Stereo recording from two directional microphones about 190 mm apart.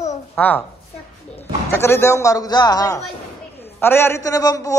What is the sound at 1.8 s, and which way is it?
A man's voice, 15° left (ahead or behind).